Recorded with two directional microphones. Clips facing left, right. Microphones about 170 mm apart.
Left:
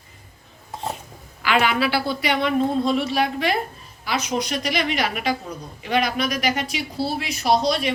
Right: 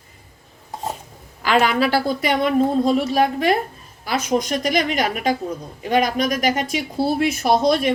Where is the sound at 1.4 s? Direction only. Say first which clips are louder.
Right 3 dB; 40° right (ahead or behind).